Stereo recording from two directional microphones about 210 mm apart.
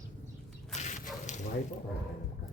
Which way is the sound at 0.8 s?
35° left (ahead or behind).